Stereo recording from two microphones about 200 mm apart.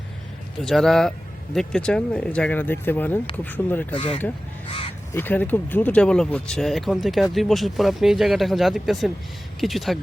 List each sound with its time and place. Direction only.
0.6 s speech: centre (ahead or behind)
3.9 s speech: 25° left (ahead or behind)
5.1 s speech: 10° left (ahead or behind)